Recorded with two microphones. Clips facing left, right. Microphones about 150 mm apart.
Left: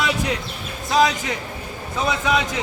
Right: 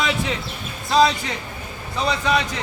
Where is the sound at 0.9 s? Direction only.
Centre (ahead or behind).